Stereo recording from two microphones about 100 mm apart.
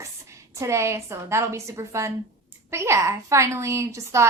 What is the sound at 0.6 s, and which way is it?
A woman's voice, 30° right (ahead or behind).